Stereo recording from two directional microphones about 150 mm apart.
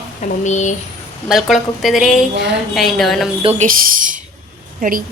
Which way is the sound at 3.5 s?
70° right (ahead or behind).